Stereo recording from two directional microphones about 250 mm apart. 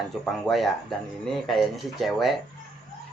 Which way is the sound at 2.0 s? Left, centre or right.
Centre.